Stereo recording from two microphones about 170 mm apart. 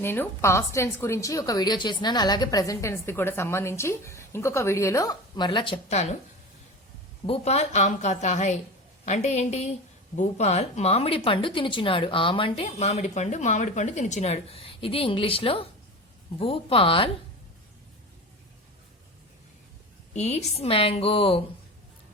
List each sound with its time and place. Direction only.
0.0 s a woman's voice: 15° left (ahead or behind); by 6.1 s 40° left (ahead or behind)
7.3 s a woman's voice: 40° left (ahead or behind)
20.1 s a woman's voice: 40° left (ahead or behind)